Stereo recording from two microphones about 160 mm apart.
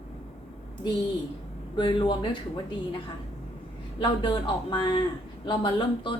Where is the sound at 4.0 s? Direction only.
30° left (ahead or behind).